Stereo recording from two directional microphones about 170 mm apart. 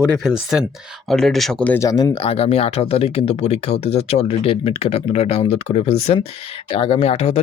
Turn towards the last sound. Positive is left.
turn(degrees=35)  # may be behind; listen again after turning